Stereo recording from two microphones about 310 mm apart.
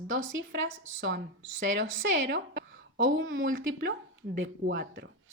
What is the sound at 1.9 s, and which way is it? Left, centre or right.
A woman's voice, right.